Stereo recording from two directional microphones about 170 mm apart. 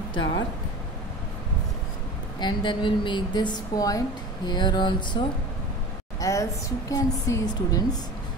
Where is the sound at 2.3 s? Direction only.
25° left (ahead or behind).